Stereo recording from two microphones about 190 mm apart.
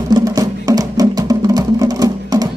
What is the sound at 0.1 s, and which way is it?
Music, 20° right (ahead or behind).